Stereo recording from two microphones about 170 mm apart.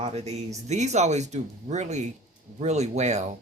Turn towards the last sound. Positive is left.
turn(degrees=-40)  # may be behind; listen again after turning